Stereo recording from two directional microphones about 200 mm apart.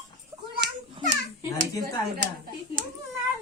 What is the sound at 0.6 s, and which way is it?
Children playing, 60° right (ahead or behind).